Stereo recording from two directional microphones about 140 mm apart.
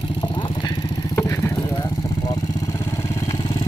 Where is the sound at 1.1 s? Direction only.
20° left (ahead or behind).